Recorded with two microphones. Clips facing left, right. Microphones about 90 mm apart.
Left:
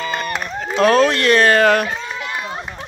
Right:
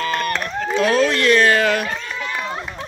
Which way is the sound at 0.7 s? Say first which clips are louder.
Left 4 dB; 55° left (ahead or behind).